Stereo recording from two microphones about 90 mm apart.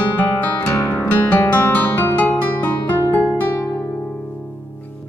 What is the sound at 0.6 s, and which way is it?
Music, 30° left (ahead or behind).